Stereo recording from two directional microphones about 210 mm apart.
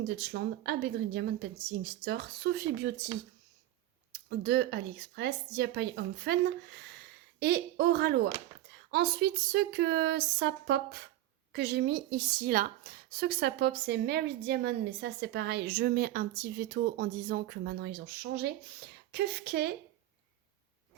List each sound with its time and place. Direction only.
0.2 s a woman's voice: 50° right (ahead or behind)
4.1 s a woman's voice: 50° right (ahead or behind)